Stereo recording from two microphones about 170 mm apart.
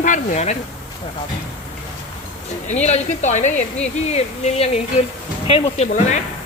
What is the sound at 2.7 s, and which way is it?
Speech, 40° left (ahead or behind).